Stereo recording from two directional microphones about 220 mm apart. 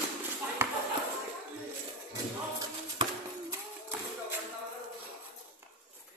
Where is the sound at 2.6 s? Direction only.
15° right (ahead or behind).